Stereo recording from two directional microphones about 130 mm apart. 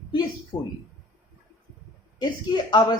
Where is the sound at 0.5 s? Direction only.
80° left.